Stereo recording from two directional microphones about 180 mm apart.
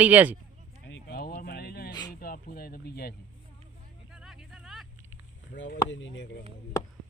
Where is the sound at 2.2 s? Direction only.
55° left (ahead or behind).